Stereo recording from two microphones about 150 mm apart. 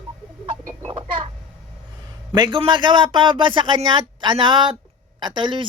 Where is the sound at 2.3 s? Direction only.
30° right (ahead or behind).